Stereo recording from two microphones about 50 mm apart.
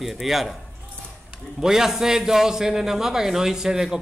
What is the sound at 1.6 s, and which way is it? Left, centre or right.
A man's voice, centre.